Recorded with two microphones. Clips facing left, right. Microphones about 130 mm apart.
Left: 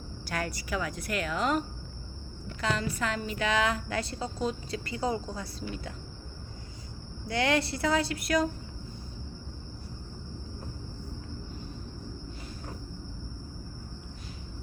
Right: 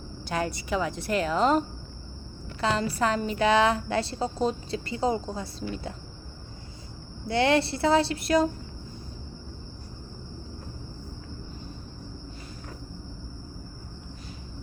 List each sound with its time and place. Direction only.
0.3 s a woman's voice: 25° right (ahead or behind)
7.3 s a woman's voice: 30° right (ahead or behind)